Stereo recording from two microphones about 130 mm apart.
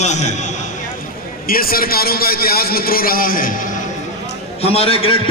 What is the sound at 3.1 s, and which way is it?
Speech, 90° left.